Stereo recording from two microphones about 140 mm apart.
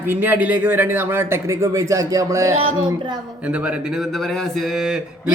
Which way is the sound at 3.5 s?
10° right (ahead or behind).